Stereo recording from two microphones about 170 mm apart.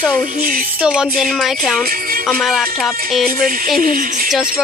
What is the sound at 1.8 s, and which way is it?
Music, 60° right (ahead or behind).